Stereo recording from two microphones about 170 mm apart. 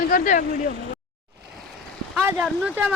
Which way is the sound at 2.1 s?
5° right (ahead or behind).